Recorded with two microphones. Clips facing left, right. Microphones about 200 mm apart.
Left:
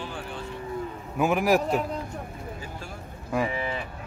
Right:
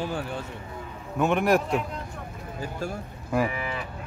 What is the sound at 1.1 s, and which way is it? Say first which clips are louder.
Speech: even; 5° left (ahead or behind).